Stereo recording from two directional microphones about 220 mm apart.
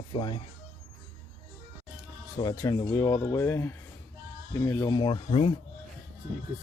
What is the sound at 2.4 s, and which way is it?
Speech, 15° left (ahead or behind).